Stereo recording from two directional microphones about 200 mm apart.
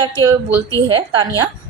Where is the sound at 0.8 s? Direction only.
20° right (ahead or behind).